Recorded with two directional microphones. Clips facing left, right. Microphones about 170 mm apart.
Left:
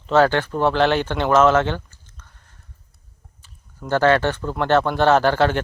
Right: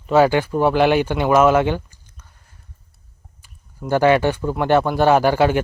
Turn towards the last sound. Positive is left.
turn(degrees=-10)  # may be behind; listen again after turning